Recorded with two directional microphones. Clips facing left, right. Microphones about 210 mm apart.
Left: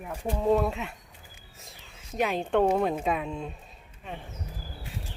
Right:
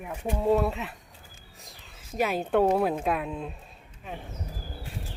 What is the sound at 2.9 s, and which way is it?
Speech, centre (ahead or behind).